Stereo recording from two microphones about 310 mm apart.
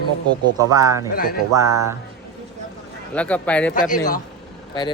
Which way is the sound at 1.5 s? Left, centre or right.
Centre.